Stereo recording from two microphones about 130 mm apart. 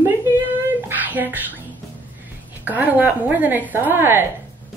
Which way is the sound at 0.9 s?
15° right (ahead or behind).